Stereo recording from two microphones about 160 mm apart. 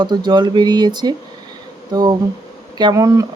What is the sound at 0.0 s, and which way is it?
Speech, 30° right (ahead or behind).